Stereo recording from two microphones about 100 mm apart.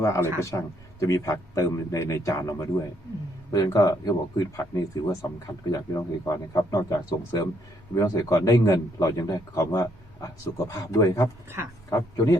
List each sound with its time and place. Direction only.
0.0 s a man's voice: 30° left (ahead or behind)
11.4 s speech: 25° right (ahead or behind)
11.9 s a man's voice: 30° left (ahead or behind)